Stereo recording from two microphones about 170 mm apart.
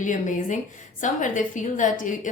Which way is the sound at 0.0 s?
50° left (ahead or behind).